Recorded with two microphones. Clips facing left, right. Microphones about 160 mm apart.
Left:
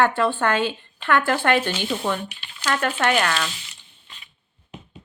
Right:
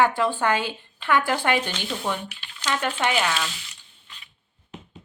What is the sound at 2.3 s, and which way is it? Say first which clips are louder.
Speech: left 1 dB; 15° left (ahead or behind).